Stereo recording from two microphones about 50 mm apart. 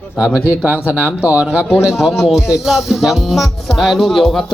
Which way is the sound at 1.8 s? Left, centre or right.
Centre.